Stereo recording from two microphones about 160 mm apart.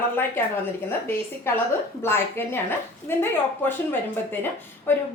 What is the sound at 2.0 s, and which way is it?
A woman's voice, 15° left (ahead or behind).